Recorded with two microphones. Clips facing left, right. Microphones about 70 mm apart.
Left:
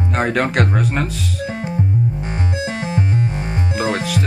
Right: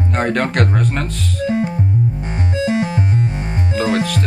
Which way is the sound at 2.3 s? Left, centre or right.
Left.